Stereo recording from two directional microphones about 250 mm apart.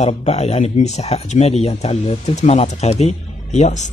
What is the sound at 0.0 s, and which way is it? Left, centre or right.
Speech, left.